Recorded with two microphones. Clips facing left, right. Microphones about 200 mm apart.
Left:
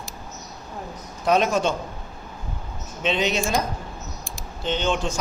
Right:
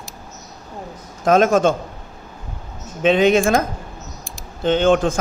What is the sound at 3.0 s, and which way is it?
Speech, 50° right (ahead or behind).